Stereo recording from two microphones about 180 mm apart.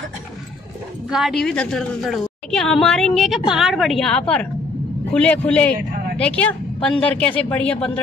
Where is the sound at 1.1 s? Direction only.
Centre (ahead or behind).